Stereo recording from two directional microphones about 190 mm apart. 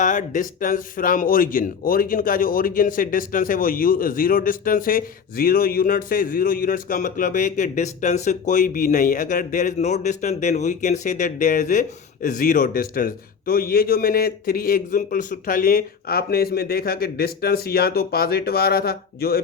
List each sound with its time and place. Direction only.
0.0 s a man's voice: 45° left (ahead or behind)